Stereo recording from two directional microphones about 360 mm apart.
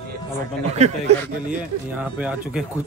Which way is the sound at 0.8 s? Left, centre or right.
Centre.